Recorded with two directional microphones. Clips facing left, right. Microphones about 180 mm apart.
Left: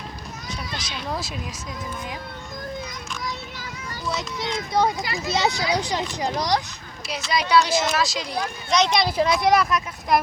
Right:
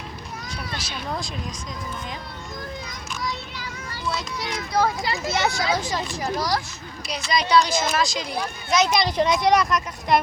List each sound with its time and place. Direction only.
4.1 s a child's voice: 20° left (ahead or behind)
7.1 s speech: 5° left (ahead or behind)